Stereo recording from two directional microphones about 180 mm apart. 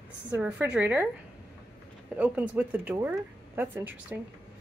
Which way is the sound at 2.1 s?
10° right (ahead or behind).